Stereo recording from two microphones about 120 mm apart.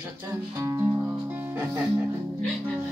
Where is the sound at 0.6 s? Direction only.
25° right (ahead or behind).